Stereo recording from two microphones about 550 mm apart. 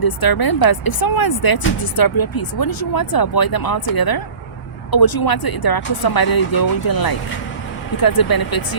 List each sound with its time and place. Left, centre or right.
0.0 s speech: left